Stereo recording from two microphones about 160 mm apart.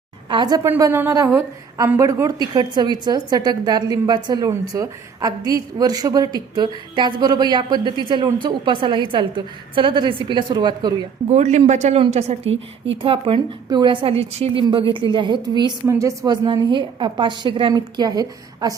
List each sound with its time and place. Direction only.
0.3 s a woman's voice: 30° right (ahead or behind)
0.7 s a woman's voice: 15° right (ahead or behind)
11.3 s a woman's voice: 45° right (ahead or behind); by 18.7 s 25° right (ahead or behind)